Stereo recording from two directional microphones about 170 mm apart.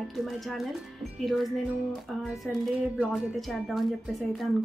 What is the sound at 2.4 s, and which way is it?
A woman's voice, centre (ahead or behind).